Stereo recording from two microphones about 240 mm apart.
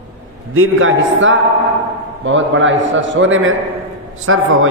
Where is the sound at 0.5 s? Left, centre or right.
Right.